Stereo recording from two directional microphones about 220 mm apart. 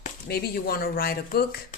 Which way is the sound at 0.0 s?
40° left (ahead or behind).